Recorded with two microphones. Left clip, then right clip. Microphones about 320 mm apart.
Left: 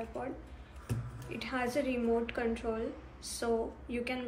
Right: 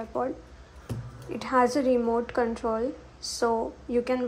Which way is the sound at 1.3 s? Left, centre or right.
Right.